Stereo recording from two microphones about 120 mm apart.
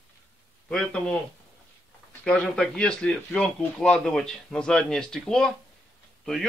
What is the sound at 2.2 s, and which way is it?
A man's voice, 10° left (ahead or behind).